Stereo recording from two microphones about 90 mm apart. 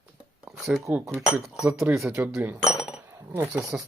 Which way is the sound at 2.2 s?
20° right (ahead or behind).